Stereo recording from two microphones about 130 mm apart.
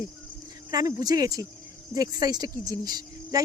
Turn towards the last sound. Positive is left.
turn(degrees=-30)  # may be behind; listen again after turning